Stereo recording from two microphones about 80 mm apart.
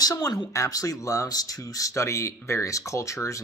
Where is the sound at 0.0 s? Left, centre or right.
Left.